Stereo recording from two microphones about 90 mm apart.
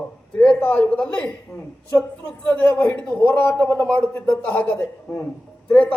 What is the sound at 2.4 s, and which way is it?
A man's voice, 15° left (ahead or behind).